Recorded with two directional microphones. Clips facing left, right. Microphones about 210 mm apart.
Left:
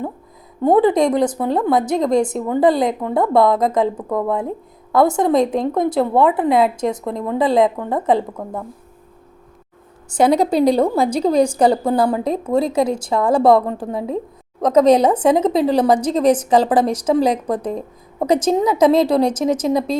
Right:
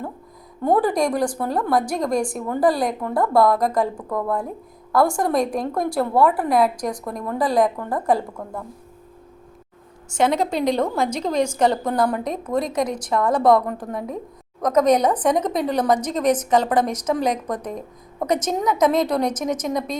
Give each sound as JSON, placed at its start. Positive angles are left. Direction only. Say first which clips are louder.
{"t": 0.6, "sound": "a woman's voice", "louder": "left 5 dB", "side_deg": 20}
{"t": 10.1, "sound": "a woman's voice", "louder": "left 5 dB", "side_deg": 35}